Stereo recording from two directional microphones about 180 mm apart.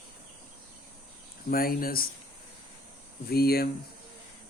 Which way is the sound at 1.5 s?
55° left (ahead or behind).